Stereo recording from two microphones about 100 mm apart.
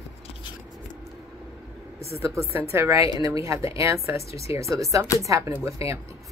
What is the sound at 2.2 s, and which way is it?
Speech, 30° right (ahead or behind).